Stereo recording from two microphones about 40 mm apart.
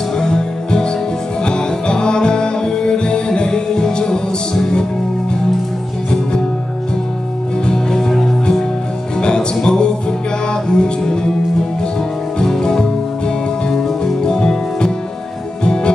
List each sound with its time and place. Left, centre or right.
0.2 s music: centre
7.6 s music: centre
9.2 s music: left
12.4 s music: centre
14.0 s music: centre